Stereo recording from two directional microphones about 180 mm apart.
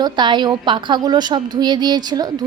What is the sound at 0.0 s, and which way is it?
A woman's voice, 25° right (ahead or behind).